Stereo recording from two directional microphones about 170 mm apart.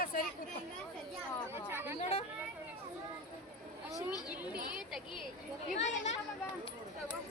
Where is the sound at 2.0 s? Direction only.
35° left (ahead or behind).